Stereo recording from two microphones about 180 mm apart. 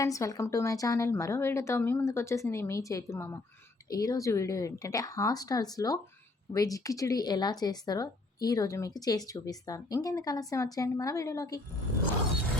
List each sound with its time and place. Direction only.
0.0 s a woman's voice: 20° left (ahead or behind)